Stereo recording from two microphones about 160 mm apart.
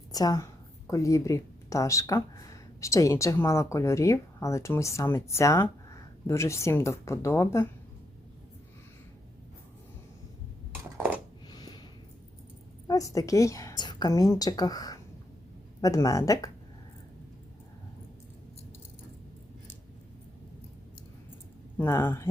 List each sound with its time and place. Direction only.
0.1 s a woman's voice: 25° left (ahead or behind)
11.5 s a sound: 25° left (ahead or behind)
12.9 s speech: 20° left (ahead or behind)
21.8 s speech: 15° left (ahead or behind)